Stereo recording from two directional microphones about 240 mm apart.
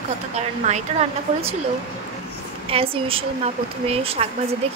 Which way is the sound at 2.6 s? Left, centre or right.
Right.